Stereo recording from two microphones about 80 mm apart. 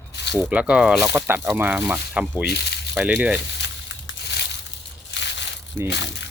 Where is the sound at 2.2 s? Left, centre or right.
Centre.